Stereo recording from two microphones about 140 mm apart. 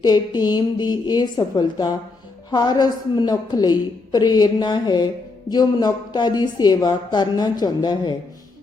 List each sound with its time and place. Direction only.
0.0 s a woman's voice: 30° left (ahead or behind)